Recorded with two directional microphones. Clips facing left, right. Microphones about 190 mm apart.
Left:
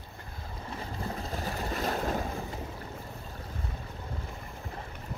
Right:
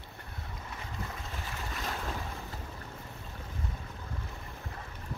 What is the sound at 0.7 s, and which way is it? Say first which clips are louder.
Boat: left 6 dB; 35° left (ahead or behind).